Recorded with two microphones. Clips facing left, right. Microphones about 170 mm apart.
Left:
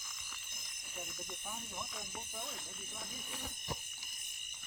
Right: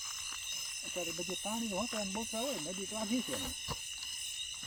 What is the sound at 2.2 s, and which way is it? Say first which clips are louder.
Speech: right 11 dB; 65° right (ahead or behind).